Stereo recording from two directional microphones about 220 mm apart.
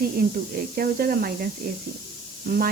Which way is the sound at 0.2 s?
40° right (ahead or behind).